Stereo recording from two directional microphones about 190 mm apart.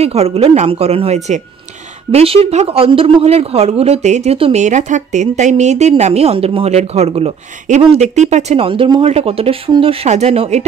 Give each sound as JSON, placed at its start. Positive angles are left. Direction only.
{"t": 0.0, "sound": "speech", "side_deg": -35}